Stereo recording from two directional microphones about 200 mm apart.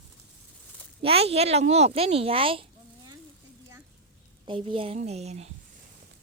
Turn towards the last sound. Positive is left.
turn(degrees=-35)  # may be behind; listen again after turning